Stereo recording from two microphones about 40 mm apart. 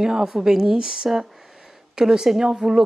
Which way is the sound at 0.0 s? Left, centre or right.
Centre.